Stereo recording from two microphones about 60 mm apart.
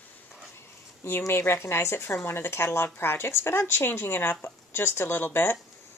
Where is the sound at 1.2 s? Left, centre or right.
Left.